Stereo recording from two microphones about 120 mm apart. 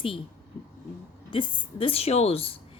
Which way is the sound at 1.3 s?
50° left (ahead or behind).